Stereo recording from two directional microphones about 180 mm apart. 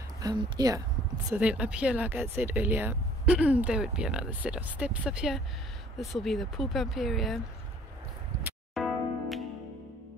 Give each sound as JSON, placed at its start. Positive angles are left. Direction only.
{"t": 0.2, "sound": "speech", "side_deg": -20}
{"t": 1.3, "sound": "speech", "side_deg": -5}
{"t": 8.7, "sound": "music", "side_deg": 0}